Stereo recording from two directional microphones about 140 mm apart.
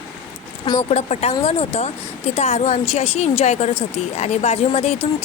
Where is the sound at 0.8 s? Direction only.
50° left (ahead or behind).